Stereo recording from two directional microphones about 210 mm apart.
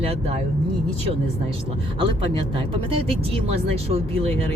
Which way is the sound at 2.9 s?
25° right (ahead or behind).